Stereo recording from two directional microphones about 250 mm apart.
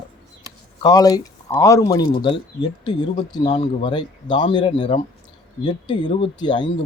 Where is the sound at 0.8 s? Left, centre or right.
Centre.